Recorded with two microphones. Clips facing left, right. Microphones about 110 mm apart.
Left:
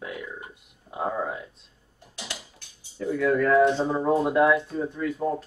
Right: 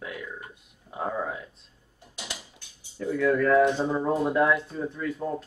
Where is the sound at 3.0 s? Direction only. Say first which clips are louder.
Left 1 dB; 10° left (ahead or behind).